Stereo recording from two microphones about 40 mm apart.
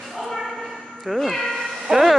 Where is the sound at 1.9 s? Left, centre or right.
Centre.